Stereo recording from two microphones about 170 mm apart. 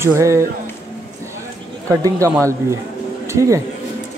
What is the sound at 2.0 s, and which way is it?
Speech, 20° right (ahead or behind).